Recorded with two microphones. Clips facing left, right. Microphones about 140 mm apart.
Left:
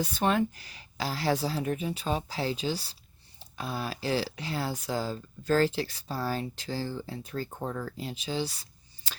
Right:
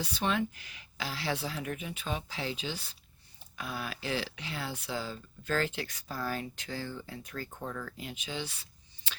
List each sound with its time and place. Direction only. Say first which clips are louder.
0.0 s speech: left 5 dB; 45° left (ahead or behind)
9.1 s scissors: left 2 dB; 40° left (ahead or behind)